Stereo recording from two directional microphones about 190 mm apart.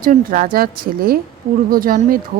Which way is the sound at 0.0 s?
45° right (ahead or behind).